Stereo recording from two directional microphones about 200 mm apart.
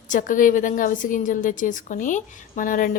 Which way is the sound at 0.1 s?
40° left (ahead or behind).